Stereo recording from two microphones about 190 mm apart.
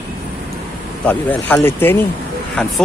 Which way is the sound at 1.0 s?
10° left (ahead or behind).